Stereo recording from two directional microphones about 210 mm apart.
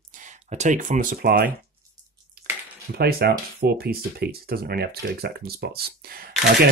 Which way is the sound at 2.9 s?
45° right (ahead or behind).